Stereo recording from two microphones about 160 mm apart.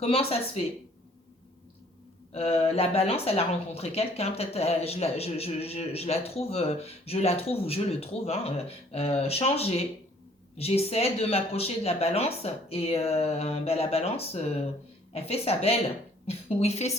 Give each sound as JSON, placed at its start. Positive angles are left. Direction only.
{"t": 0.0, "sound": "speech", "side_deg": 35}
{"t": 2.3, "sound": "speech", "side_deg": 40}